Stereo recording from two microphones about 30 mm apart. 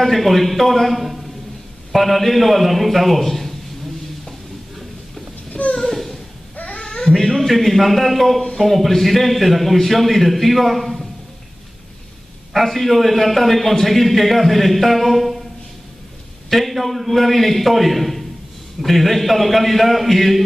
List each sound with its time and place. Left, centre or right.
0.0 s a man's voice: centre
5.5 s a sound: left
6.8 s a sound: left
7.1 s a man's voice: centre
12.5 s a man's voice: centre
16.4 s a man's voice: centre